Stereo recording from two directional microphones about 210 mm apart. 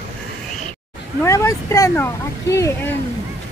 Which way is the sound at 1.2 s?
15° left (ahead or behind).